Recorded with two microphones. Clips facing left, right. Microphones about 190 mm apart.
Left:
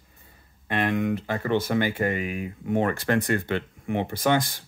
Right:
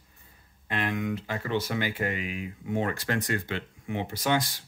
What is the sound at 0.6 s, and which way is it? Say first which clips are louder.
Speech: left 5 dB; 60° left (ahead or behind).